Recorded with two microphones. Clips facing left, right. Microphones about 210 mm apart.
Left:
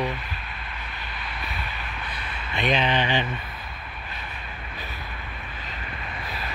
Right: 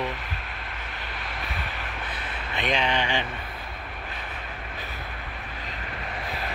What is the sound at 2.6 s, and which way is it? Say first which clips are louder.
Speech: left 3 dB; 15° right (ahead or behind).